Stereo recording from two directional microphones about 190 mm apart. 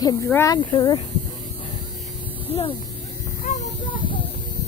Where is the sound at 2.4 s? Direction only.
30° left (ahead or behind).